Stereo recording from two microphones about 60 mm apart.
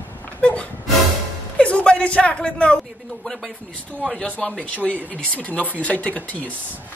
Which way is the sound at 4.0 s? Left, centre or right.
Centre.